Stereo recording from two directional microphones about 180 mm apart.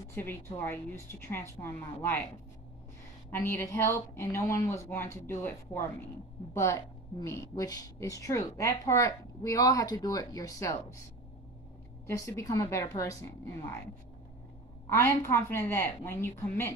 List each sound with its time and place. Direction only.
0.1 s speech: 10° left (ahead or behind)
3.3 s speech: 15° left (ahead or behind)
12.1 s speech: 15° left (ahead or behind)
14.9 s speech: 15° left (ahead or behind)